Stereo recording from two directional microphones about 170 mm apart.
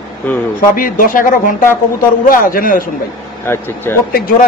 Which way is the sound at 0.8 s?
50° left (ahead or behind).